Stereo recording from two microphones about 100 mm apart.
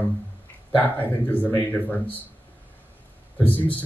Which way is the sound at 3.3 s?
15° left (ahead or behind).